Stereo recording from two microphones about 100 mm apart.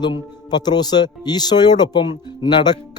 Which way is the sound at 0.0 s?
45° left (ahead or behind).